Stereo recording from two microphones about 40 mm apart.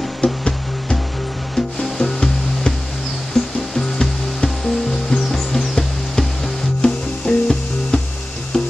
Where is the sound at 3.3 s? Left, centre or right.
Centre.